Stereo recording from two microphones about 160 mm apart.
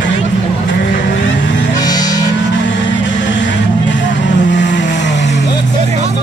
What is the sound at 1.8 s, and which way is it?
Music, 25° left (ahead or behind).